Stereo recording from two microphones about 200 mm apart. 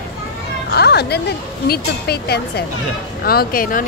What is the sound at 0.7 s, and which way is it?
A woman's voice, 55° left (ahead or behind).